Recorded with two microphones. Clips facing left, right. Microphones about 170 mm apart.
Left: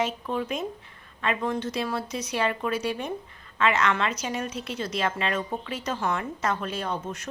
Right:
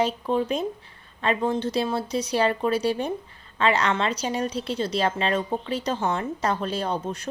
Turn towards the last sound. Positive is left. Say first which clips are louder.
# right 4 dB
turn(degrees=-30)  # may be behind; listen again after turning